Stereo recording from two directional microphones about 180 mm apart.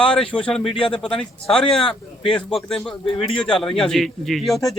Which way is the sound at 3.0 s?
30° left (ahead or behind).